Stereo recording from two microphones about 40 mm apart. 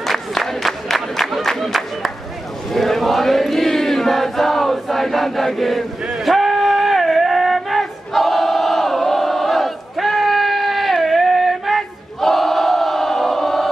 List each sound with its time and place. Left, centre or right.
0.4 s crowd: centre
1.5 s music: centre
2.7 s chant: centre
6.0 s music: centre